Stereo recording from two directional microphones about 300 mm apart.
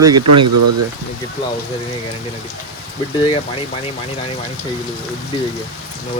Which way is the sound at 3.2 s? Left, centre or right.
Centre.